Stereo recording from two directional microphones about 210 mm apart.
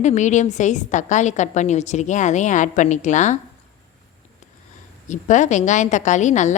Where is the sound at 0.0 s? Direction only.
35° left (ahead or behind).